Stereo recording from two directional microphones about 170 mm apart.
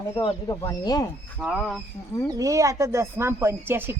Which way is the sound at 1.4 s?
5° right (ahead or behind).